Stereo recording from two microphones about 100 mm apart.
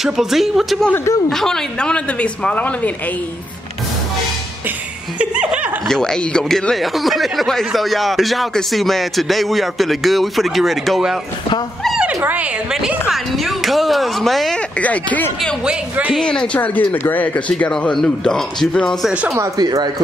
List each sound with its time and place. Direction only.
0.0 s speech: 5° right (ahead or behind)
0.9 s speech: 30° left (ahead or behind)
1.3 s speech: 5° left (ahead or behind)
5.2 s laughter: 10° right (ahead or behind)
5.9 s speech: 5° left (ahead or behind)
12.2 s speech: 15° right (ahead or behind)
13.1 s speech: centre (ahead or behind)
14.8 s speech: 15° left (ahead or behind)
15.6 s speech: 10° right (ahead or behind)
16.2 s speech: 10° left (ahead or behind)
19.3 s speech: 35° right (ahead or behind)